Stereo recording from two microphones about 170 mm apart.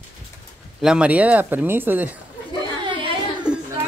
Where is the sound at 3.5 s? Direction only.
5° right (ahead or behind).